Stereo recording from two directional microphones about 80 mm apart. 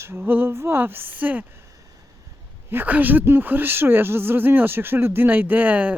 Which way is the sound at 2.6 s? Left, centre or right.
Right.